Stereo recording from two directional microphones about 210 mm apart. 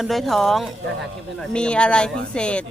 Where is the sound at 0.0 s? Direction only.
Centre (ahead or behind).